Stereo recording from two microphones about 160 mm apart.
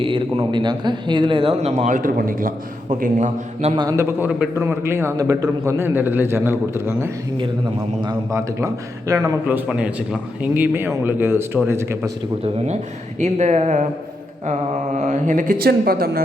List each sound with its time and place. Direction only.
0.0 s a man's voice: 35° right (ahead or behind)
3.8 s a man's voice: 20° right (ahead or behind)
13.1 s a man's voice: 45° right (ahead or behind)
14.9 s speech: 50° right (ahead or behind); by 16.2 s 70° right (ahead or behind)